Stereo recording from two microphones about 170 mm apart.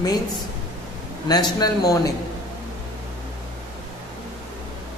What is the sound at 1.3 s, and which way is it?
Speech, 25° left (ahead or behind).